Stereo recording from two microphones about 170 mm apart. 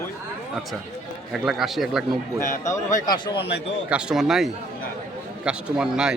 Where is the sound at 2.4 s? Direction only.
50° left (ahead or behind).